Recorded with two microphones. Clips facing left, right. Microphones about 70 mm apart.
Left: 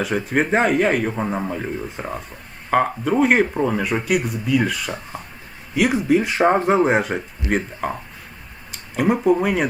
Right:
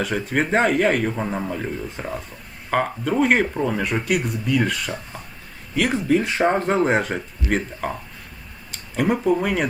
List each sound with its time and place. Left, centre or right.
0.0 s a man's voice: centre
7.4 s speech: left
7.8 s a man's voice: centre
8.7 s a sound: centre
9.2 s a man's voice: centre